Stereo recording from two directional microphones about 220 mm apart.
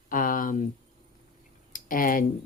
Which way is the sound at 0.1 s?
40° left (ahead or behind).